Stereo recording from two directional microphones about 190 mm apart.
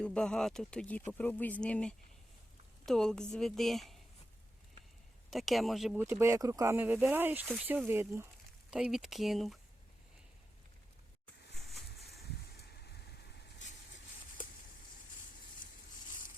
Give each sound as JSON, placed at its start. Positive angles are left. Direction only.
{"t": 0.0, "sound": "speech", "side_deg": 5}
{"t": 5.3, "sound": "speech", "side_deg": 0}
{"t": 12.5, "sound": "vehicle", "side_deg": 55}